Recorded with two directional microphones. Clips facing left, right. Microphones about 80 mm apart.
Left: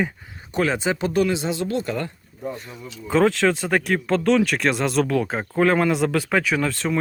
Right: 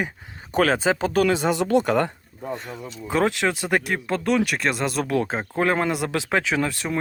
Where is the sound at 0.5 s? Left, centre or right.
Right.